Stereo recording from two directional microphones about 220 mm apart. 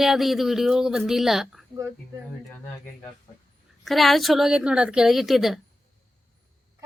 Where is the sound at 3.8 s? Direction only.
Centre (ahead or behind).